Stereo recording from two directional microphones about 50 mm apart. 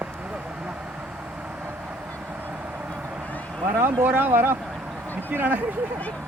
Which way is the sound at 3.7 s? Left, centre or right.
Right.